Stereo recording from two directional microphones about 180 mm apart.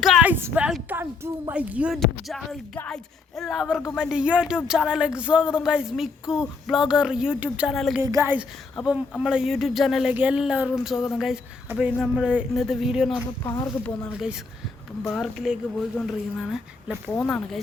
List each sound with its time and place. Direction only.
0.0 s a woman's voice: 5° right (ahead or behind)
8.0 s a woman's voice: 15° right (ahead or behind)
8.7 s a woman's voice: centre (ahead or behind)
13.4 s speech: 20° left (ahead or behind)
13.8 s a woman's voice: 5° left (ahead or behind)